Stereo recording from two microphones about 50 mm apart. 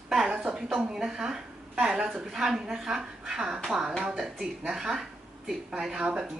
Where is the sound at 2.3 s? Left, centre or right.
Centre.